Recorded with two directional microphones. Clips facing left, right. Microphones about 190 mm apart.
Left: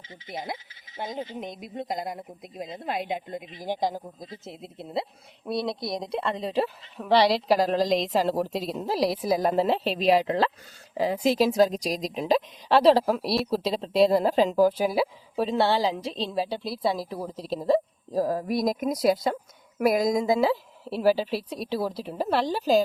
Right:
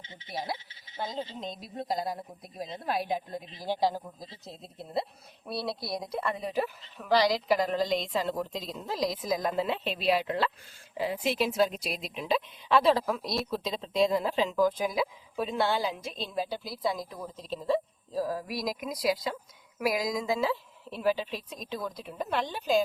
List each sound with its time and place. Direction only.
0.9 s a woman's voice: 20° left (ahead or behind); by 7.9 s 35° left (ahead or behind)
7.9 s a woman's voice: 90° left
8.1 s a woman's voice: 35° left (ahead or behind)